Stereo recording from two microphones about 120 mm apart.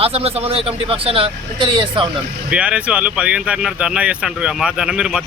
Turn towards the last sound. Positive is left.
turn(degrees=-10)  # may be behind; listen again after turning